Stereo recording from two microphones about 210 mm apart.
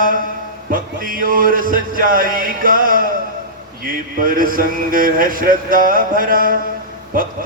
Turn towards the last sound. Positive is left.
turn(degrees=-40)  # may be behind; listen again after turning